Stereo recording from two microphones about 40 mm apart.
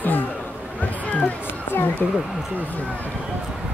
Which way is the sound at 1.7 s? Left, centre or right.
Left.